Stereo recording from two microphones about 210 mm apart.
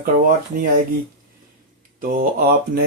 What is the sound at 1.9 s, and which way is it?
Speech, 40° right (ahead or behind).